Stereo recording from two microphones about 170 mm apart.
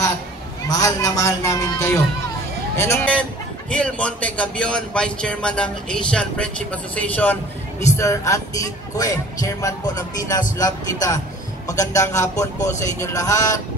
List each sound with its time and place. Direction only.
0.7 s a man's voice: 20° left (ahead or behind)